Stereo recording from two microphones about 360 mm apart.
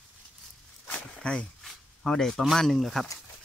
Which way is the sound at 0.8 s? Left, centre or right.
Centre.